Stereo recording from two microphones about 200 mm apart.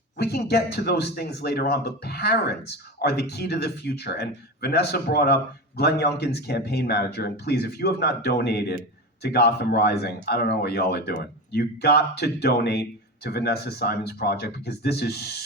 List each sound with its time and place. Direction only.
0.2 s speech: 55° left (ahead or behind)